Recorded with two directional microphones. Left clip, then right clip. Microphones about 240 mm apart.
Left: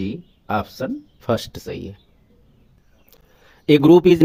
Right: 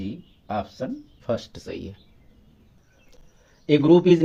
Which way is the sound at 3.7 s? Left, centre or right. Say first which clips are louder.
Left 4 dB; left.